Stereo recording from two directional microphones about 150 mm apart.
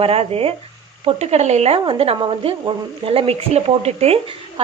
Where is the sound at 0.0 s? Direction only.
40° right (ahead or behind).